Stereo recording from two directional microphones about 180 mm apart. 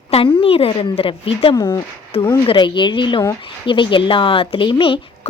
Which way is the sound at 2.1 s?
30° left (ahead or behind).